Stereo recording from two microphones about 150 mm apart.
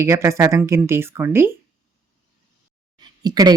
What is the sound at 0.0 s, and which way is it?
A woman's voice, 20° right (ahead or behind).